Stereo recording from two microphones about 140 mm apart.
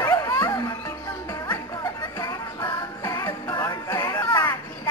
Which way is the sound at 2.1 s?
25° left (ahead or behind).